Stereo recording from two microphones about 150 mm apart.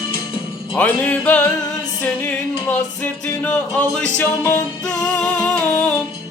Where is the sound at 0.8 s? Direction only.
10° left (ahead or behind).